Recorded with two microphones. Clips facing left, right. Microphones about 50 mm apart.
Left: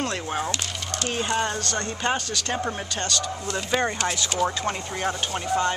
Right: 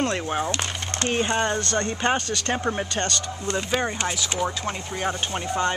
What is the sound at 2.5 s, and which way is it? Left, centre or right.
Speech, centre.